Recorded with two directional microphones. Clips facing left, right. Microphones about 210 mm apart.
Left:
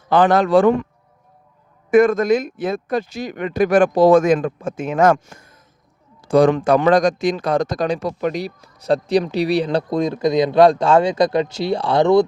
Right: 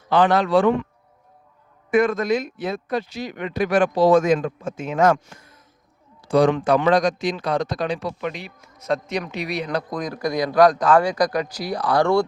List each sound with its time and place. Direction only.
0.1 s speech: 50° left (ahead or behind)
1.9 s a man's voice: 45° left (ahead or behind); by 12.2 s 20° left (ahead or behind)